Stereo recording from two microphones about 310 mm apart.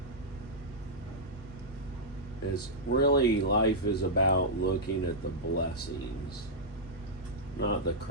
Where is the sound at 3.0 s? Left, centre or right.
Left.